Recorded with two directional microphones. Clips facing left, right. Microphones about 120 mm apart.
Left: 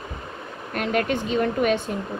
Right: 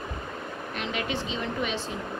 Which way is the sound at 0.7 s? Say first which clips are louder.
Left 8 dB; 50° left (ahead or behind).